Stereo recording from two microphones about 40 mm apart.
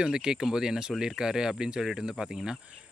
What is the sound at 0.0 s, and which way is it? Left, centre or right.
Speech, right.